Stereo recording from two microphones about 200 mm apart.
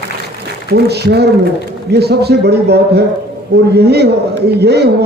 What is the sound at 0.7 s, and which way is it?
A man's voice, 55° right (ahead or behind).